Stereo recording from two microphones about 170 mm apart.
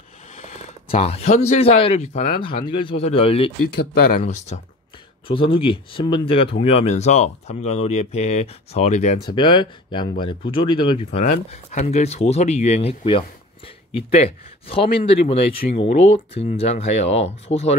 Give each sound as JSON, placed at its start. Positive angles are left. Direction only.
{"t": 0.4, "sound": "a sound", "side_deg": 40}
{"t": 1.5, "sound": "speech", "side_deg": 35}
{"t": 5.3, "sound": "speech", "side_deg": 30}
{"t": 9.2, "sound": "speech", "side_deg": 25}
{"t": 11.4, "sound": "speech", "side_deg": 40}